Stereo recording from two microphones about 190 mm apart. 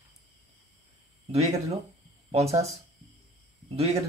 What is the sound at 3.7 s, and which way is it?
Speech, 35° right (ahead or behind).